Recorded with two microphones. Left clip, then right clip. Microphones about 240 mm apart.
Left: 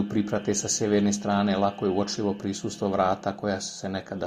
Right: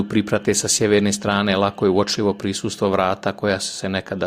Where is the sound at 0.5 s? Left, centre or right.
Right.